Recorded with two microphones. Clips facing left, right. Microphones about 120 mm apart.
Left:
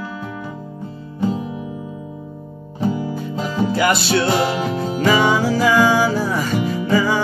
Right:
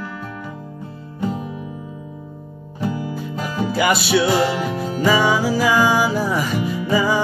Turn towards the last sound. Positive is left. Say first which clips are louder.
# left 1 dB
turn(degrees=-10)  # may be behind; listen again after turning